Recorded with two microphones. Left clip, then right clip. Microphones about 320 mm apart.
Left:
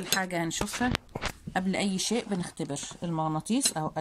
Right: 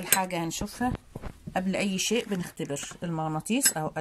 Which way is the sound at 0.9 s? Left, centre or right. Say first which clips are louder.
Left 4 dB; left.